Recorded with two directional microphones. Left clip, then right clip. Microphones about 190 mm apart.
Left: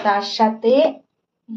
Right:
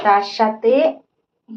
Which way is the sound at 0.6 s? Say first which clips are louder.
Even; 20° right (ahead or behind).